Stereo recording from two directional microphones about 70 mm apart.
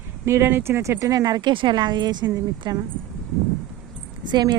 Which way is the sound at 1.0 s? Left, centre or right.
Right.